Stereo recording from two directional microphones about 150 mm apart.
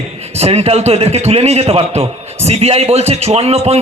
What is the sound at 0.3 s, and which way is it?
A man's voice, 45° right (ahead or behind).